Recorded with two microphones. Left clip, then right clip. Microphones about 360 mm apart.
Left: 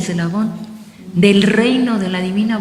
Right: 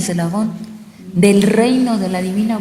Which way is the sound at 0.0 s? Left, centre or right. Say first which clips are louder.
Right 1 dB; centre.